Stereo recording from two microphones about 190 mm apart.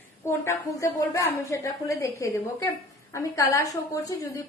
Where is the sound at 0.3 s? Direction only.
15° left (ahead or behind).